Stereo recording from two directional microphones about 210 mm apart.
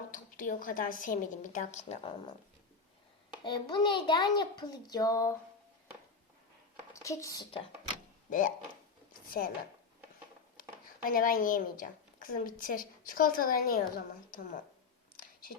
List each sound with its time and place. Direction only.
0.1 s a woman's voice: 40° left (ahead or behind)
3.4 s a child's voice: 20° left (ahead or behind)
6.9 s speech: 15° left (ahead or behind)
8.3 s speech: 40° left (ahead or behind)
11.0 s a woman's voice: 40° left (ahead or behind)